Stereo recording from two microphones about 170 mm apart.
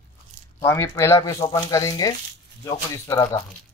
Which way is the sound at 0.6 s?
15° left (ahead or behind).